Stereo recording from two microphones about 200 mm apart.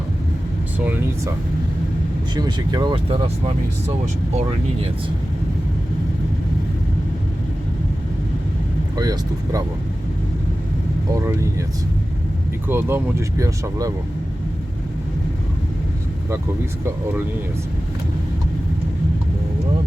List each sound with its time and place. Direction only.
2.3 s speech: 20° right (ahead or behind)
9.0 s speech: 15° right (ahead or behind)
11.1 s speech: 15° right (ahead or behind)
12.6 s speech: 10° right (ahead or behind)